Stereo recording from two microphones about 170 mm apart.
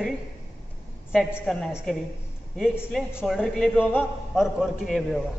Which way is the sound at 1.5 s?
Centre (ahead or behind).